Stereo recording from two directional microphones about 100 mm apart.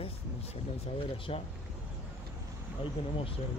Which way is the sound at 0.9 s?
65° left (ahead or behind).